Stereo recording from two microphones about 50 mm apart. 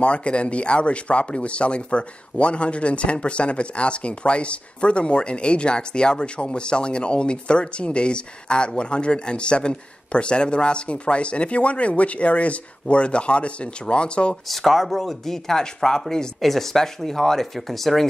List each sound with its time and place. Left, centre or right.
0.0 s speech: left
14.5 s speech: centre